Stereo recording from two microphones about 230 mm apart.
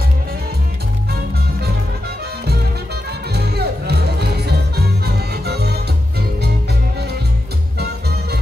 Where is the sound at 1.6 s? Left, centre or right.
Right.